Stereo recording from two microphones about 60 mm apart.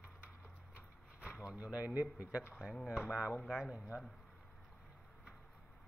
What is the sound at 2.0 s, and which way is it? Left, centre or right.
Speech, right.